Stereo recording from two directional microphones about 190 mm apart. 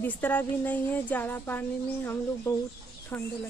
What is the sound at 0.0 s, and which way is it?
Speech, 10° left (ahead or behind).